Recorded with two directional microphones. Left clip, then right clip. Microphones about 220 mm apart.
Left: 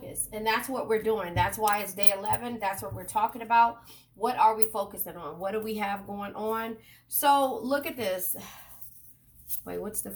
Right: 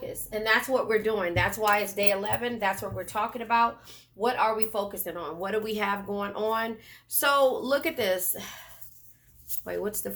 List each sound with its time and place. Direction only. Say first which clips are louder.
0.7 s speech: right 2 dB; 45° right (ahead or behind)
9.6 s speech: right 4 dB; 40° right (ahead or behind)